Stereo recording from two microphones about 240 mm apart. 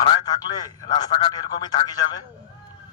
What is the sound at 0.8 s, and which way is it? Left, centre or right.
A man's voice, centre.